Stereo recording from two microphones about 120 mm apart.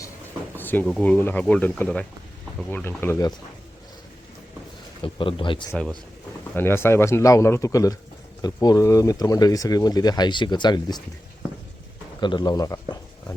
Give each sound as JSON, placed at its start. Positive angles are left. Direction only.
{"t": 0.5, "sound": "a sound", "side_deg": 15}
{"t": 0.9, "sound": "a man's voice", "side_deg": 10}
{"t": 5.0, "sound": "speech", "side_deg": 45}
{"t": 6.5, "sound": "a man's voice", "side_deg": 20}
{"t": 12.2, "sound": "speech", "side_deg": 40}